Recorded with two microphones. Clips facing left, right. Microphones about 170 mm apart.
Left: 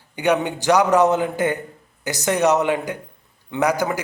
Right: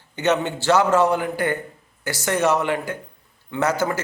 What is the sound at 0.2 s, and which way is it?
A man's voice, 15° left (ahead or behind).